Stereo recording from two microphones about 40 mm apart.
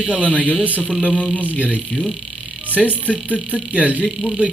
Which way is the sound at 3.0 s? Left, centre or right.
Left.